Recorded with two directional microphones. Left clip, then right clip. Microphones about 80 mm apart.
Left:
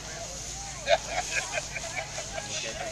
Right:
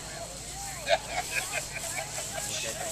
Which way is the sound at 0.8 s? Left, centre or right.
Centre.